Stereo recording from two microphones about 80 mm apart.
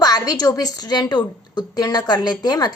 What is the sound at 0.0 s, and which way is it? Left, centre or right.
Speech, left.